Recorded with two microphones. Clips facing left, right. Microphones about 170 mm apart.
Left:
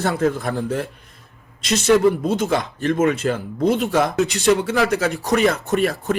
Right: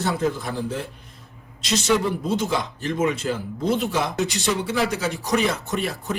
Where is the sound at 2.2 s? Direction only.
60° left (ahead or behind).